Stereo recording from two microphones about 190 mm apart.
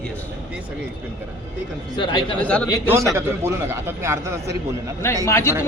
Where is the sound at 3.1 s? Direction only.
10° right (ahead or behind).